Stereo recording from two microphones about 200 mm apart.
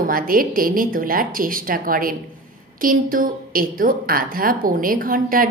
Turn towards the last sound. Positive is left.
turn(degrees=-45)  # may be behind; listen again after turning